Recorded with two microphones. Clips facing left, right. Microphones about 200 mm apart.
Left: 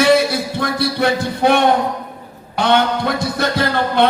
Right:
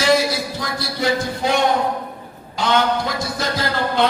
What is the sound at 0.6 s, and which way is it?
A man's voice, 60° left (ahead or behind).